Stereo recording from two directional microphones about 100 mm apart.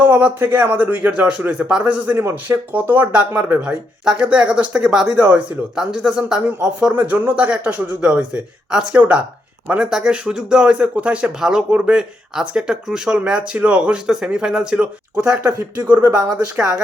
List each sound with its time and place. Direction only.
0.0 s speech: 15° right (ahead or behind)
15.9 s speech: 20° right (ahead or behind)